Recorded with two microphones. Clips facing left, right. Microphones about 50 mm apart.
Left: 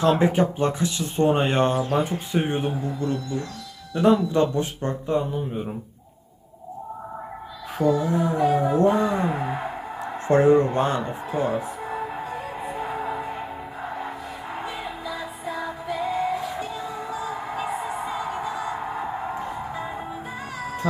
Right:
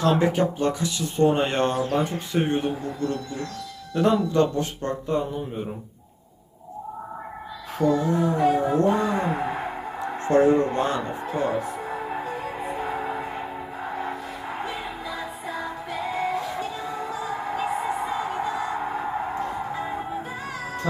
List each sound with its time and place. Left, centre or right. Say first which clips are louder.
0.2 s speech: left 1 dB; centre
0.6 s speech: left 1 dB; left
1.3 s speech: left 2 dB; centre
7.8 s speech: even; centre
8.7 s speech: left 1 dB; left
9.0 s speech: left 1 dB; centre
10.2 s speech: left 1 dB; left
10.9 s music: left 1 dB; centre
19.3 s music: right 2 dB; centre